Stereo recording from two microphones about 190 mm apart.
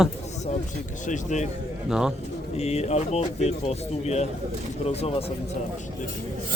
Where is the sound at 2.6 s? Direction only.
35° left (ahead or behind).